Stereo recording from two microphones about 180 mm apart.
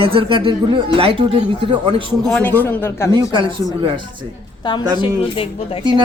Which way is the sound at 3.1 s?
25° right (ahead or behind).